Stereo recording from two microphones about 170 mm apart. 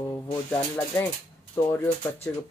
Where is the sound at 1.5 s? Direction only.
15° left (ahead or behind).